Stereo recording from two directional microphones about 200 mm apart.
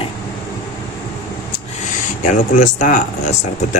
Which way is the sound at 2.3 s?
40° left (ahead or behind).